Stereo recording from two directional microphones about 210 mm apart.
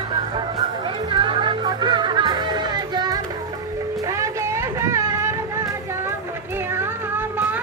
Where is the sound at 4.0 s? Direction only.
15° right (ahead or behind).